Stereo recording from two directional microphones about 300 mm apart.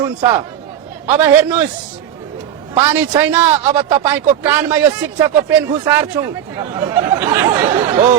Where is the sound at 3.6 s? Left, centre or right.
Centre.